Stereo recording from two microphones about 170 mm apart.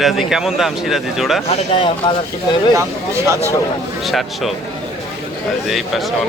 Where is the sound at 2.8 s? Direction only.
15° right (ahead or behind).